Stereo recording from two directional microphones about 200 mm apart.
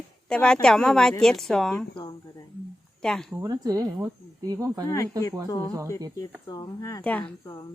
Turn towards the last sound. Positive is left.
turn(degrees=10)  # may be behind; listen again after turning